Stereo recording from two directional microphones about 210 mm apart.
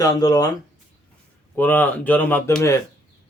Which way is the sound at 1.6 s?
10° left (ahead or behind).